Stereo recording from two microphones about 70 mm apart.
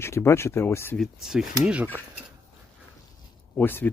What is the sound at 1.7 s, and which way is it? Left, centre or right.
Speech, right.